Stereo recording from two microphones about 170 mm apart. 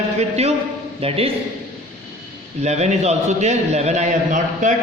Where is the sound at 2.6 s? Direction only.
40° right (ahead or behind).